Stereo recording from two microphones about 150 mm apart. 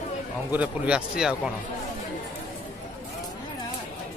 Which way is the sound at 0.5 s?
10° right (ahead or behind).